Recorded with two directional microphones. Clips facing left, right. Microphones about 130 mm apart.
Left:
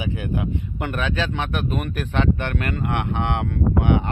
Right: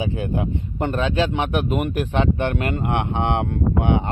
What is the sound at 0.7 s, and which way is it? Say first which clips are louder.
Speech: right 5 dB; 25° right (ahead or behind).